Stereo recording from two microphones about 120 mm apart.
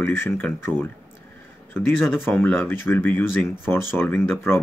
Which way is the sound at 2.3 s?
15° left (ahead or behind).